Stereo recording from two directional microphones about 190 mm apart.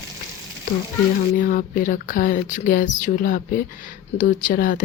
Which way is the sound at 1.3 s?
45° left (ahead or behind).